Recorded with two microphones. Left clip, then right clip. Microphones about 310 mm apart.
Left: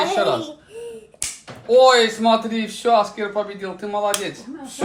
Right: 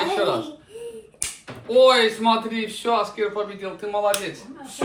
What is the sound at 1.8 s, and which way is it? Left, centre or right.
A man's voice, left.